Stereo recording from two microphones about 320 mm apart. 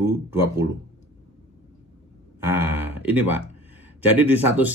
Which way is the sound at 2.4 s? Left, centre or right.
Centre.